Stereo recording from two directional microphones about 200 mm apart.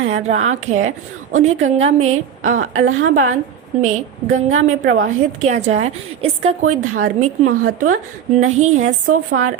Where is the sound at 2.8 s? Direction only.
80° right.